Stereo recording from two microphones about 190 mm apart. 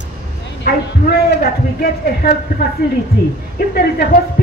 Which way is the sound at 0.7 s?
50° left (ahead or behind).